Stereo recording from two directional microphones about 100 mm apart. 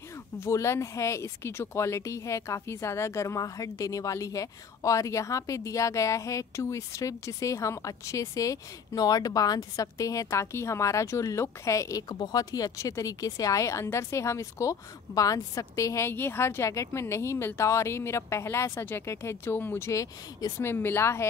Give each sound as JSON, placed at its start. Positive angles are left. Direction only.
{"t": 0.4, "sound": "speech", "side_deg": 30}
{"t": 19.9, "sound": "speech", "side_deg": 35}
{"t": 20.6, "sound": "speech", "side_deg": 25}